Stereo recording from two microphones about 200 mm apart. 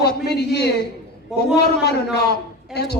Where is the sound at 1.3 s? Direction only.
Centre (ahead or behind).